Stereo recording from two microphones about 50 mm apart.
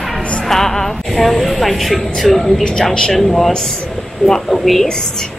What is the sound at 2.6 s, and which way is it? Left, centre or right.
A woman's voice, centre.